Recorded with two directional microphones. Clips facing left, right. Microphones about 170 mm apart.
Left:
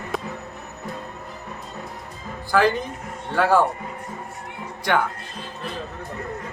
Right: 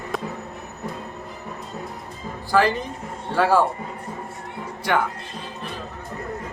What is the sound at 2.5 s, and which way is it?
Speech, centre (ahead or behind).